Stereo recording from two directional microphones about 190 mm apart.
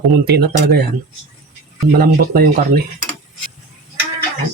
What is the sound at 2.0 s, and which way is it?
Speech, 50° right (ahead or behind).